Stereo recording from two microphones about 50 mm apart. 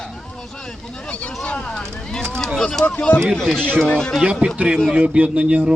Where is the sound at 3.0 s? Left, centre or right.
Left.